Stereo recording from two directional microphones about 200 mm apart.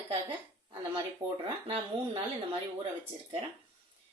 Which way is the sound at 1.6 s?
25° right (ahead or behind).